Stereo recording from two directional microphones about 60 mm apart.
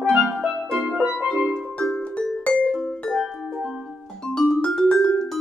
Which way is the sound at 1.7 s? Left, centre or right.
Centre.